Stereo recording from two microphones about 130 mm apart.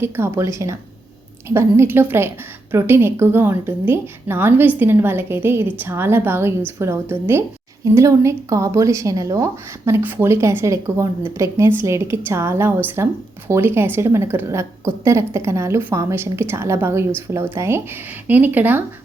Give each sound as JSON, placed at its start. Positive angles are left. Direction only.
{"t": 0.0, "sound": "a woman's voice", "side_deg": -20}